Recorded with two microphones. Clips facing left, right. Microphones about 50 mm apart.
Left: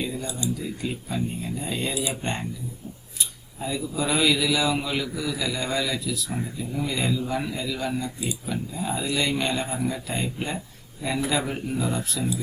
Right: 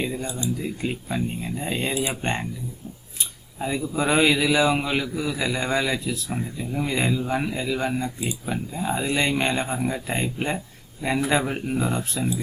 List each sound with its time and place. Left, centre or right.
0.0 s speech: right
3.2 s a sound: right
3.8 s a man's voice: right
11.4 s speech: right